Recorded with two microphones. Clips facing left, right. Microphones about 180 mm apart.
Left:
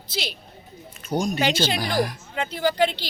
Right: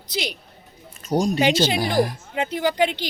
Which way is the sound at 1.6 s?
15° right (ahead or behind).